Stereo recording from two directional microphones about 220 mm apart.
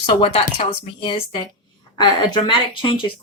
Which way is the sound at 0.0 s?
25° left (ahead or behind).